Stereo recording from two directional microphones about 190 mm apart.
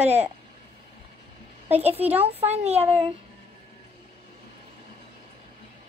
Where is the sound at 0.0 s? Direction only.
35° right (ahead or behind).